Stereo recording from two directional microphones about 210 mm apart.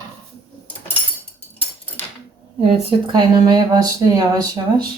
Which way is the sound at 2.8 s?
20° right (ahead or behind).